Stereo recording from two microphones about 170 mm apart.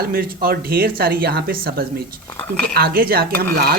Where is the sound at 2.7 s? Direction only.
65° right (ahead or behind).